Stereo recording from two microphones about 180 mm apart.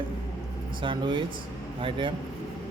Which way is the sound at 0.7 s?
25° right (ahead or behind).